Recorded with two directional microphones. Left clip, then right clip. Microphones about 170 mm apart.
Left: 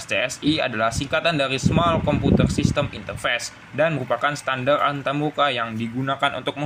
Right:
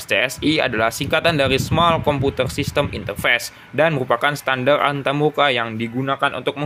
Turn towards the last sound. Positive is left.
turn(degrees=-35)  # may be behind; listen again after turning